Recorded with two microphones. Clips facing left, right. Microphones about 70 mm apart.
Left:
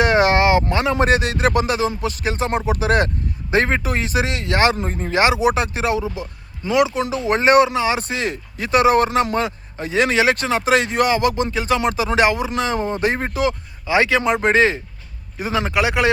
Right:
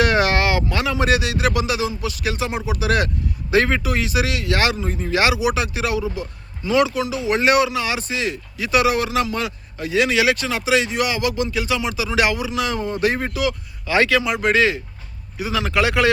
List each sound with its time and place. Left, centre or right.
0.0 s a sound: left
0.7 s speech: left
7.0 s speech: left
7.9 s speech: left
14.2 s speech: left